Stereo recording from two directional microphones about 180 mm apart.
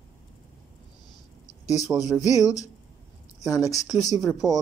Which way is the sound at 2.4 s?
20° left (ahead or behind).